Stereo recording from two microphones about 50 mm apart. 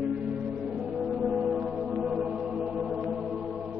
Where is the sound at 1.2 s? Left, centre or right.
Centre.